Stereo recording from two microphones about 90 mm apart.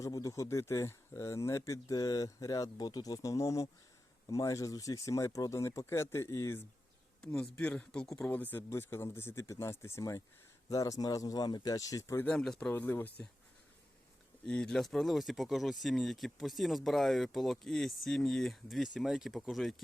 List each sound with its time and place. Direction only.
0.0 s speech: 40° left (ahead or behind)
7.2 s speech: 5° left (ahead or behind)
8.3 s speech: 20° left (ahead or behind); by 12.2 s 35° left (ahead or behind)
12.2 s speech: 10° left (ahead or behind)
12.7 s speech: 20° left (ahead or behind)
14.4 s speech: 10° left (ahead or behind)